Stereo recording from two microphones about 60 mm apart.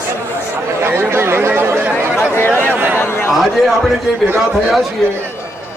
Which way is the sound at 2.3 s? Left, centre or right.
Left.